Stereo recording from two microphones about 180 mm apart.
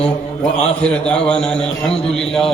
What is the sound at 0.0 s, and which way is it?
A man's voice, 5° left (ahead or behind).